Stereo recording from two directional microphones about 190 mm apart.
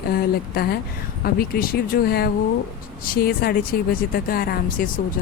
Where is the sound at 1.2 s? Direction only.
50° left (ahead or behind).